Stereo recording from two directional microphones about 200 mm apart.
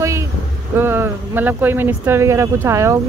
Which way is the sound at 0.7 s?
10° right (ahead or behind).